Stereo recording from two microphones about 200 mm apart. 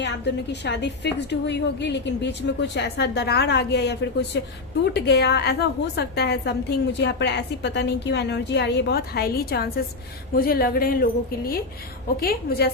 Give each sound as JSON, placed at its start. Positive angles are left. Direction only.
{"t": 0.0, "sound": "a woman's voice", "side_deg": 60}